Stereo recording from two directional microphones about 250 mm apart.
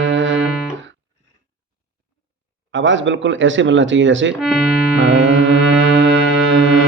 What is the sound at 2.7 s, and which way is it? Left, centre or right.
Speech, right.